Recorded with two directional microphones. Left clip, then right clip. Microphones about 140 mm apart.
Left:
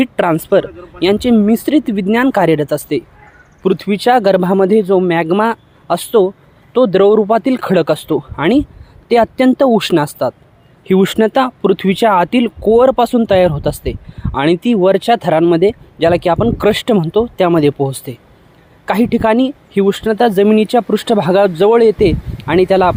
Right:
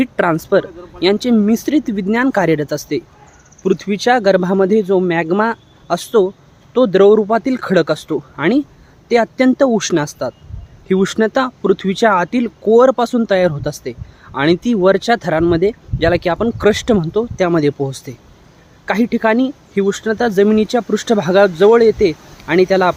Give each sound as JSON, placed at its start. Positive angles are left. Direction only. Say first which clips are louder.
{"t": 0.0, "sound": "speech", "louder": "left 2 dB", "side_deg": 15}